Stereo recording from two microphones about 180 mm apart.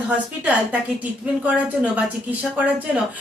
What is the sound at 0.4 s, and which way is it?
A woman's voice, 10° right (ahead or behind).